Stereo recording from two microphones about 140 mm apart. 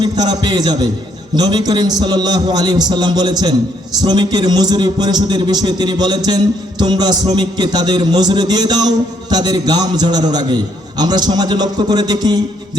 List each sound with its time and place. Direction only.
0.0 s a man's voice: 30° right (ahead or behind)